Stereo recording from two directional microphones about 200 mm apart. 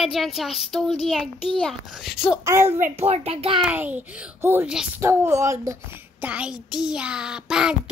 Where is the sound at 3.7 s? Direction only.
10° right (ahead or behind).